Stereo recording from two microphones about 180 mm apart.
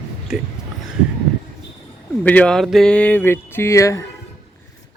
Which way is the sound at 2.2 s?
10° left (ahead or behind).